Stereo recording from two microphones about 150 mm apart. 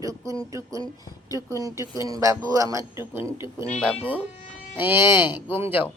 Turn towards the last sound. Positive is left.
turn(degrees=-15)  # may be behind; listen again after turning